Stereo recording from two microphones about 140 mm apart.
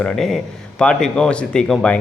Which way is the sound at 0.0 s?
5° left (ahead or behind).